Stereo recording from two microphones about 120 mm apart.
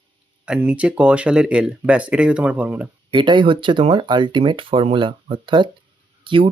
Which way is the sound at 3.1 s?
40° right (ahead or behind).